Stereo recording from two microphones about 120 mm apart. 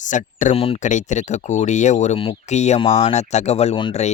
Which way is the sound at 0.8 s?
90° left.